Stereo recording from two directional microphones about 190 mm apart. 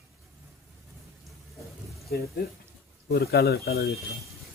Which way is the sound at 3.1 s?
55° left (ahead or behind).